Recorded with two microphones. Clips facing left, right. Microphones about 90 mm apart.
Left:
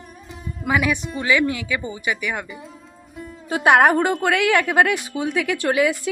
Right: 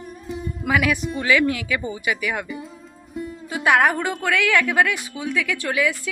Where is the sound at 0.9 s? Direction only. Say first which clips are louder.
Even; centre (ahead or behind).